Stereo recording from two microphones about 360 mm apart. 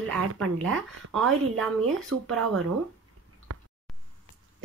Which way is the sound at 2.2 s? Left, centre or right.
Right.